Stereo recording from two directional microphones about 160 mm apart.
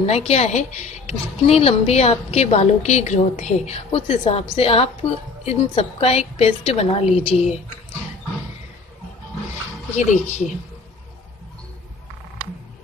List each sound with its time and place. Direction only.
0.0 s speech: 40° left (ahead or behind)
9.9 s speech: 45° left (ahead or behind)